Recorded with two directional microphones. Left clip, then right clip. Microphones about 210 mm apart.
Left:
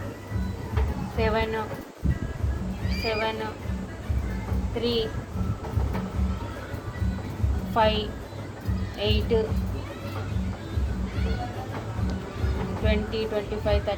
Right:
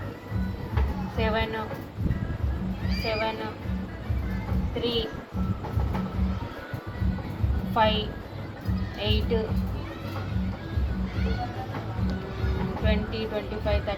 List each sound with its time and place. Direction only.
1.2 s speech: 50° left (ahead or behind)
3.1 s speech: 50° left (ahead or behind)
4.8 s speech: 55° left (ahead or behind)
7.7 s speech: 55° left (ahead or behind)
12.8 s speech: 55° left (ahead or behind)